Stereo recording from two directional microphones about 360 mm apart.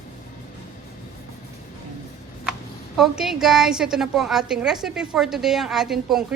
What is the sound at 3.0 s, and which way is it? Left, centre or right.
A woman's voice, centre.